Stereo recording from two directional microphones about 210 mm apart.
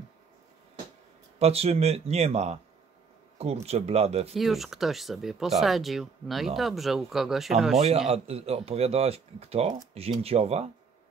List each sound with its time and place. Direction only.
1.4 s speech: 30° right (ahead or behind)
4.3 s speech: centre (ahead or behind)
8.1 s speech: 30° right (ahead or behind)